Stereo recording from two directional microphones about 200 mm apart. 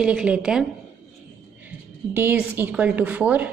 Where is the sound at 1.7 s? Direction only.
10° right (ahead or behind).